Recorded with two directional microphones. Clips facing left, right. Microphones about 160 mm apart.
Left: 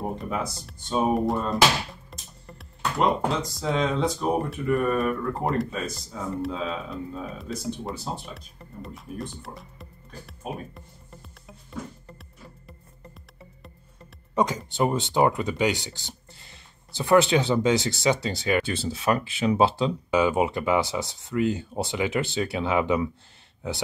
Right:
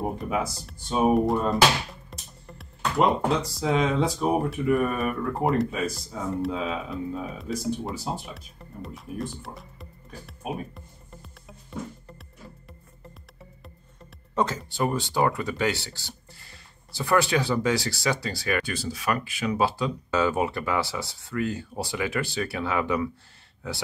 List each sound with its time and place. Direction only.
0.2 s speech: 5° right (ahead or behind)
10.5 s music: centre (ahead or behind)
12.6 s music: centre (ahead or behind)
14.3 s speech: 15° left (ahead or behind)
20.1 s speech: 15° left (ahead or behind)